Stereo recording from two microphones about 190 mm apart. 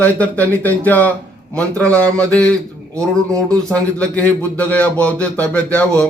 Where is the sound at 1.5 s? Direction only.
5° left (ahead or behind).